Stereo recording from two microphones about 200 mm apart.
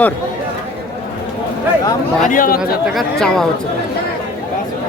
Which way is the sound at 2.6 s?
Centre (ahead or behind).